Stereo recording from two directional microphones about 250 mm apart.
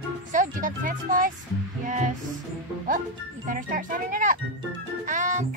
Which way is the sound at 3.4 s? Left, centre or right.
Right.